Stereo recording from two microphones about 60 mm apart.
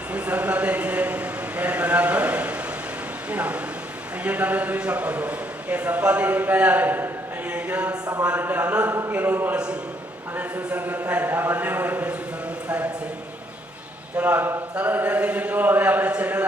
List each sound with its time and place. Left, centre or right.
0.1 s a sound: right
3.3 s a man's voice: right
7.5 s a sound: right
8.2 s a man's voice: right
10.8 s a man's voice: right
14.2 s a man's voice: right